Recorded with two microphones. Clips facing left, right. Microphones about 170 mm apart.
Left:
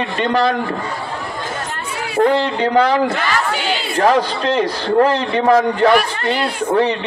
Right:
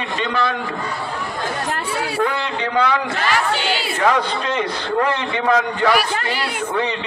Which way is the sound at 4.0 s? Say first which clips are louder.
Left 5 dB; 35° left (ahead or behind).